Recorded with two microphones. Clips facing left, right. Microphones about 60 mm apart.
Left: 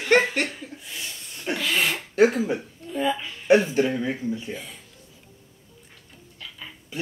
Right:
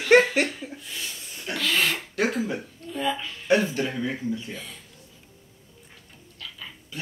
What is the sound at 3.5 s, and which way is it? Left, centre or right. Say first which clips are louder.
Speech: left 4 dB; left.